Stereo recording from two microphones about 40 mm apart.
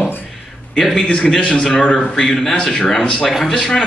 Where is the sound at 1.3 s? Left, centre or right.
Centre.